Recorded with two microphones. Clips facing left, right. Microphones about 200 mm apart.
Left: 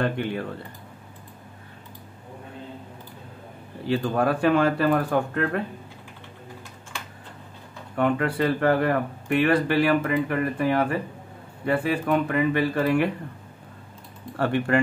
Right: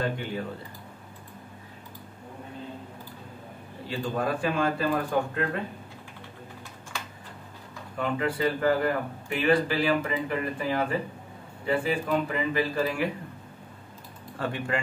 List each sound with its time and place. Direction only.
0.0 s speech: 65° left (ahead or behind)
3.8 s speech: 65° left (ahead or behind)
8.0 s speech: 65° left (ahead or behind)
14.4 s speech: 65° left (ahead or behind)